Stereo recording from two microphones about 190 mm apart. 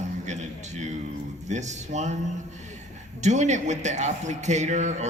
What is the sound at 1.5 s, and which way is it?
Speech, 40° right (ahead or behind).